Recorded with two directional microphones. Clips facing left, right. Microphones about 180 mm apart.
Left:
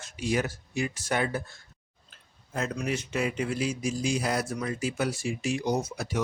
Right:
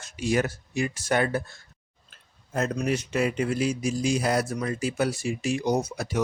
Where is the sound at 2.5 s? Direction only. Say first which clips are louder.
Right 4 dB; 40° right (ahead or behind).